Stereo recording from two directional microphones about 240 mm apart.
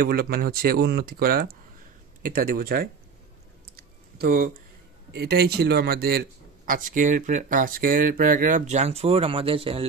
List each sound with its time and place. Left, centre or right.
0.0 s a man's voice: right
3.7 s a sound: right
5.1 s a man's voice: right